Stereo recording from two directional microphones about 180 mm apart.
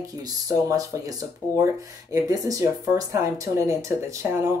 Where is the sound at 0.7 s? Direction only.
20° right (ahead or behind).